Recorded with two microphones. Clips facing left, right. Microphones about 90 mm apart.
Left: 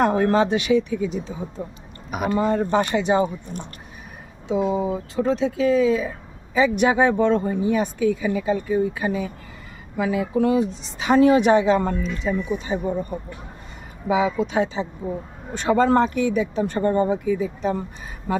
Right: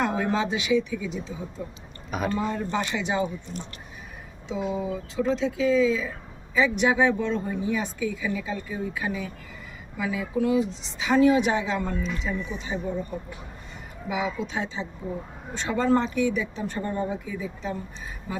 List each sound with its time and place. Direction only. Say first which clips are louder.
0.0 s speech: left 7 dB; 55° left (ahead or behind)
2.0 s a woman's voice: left 4 dB; 10° left (ahead or behind)
2.4 s speech: left 7 dB; 60° left (ahead or behind)
14.1 s a woman's voice: left 8 dB; 80° left; by 17.8 s 65° left (ahead or behind)
18.3 s speech: left 9 dB; 50° left (ahead or behind)